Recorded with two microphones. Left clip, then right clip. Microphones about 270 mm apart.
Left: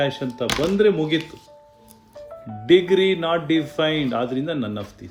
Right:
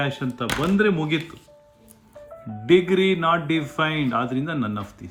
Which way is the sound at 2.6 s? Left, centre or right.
Centre.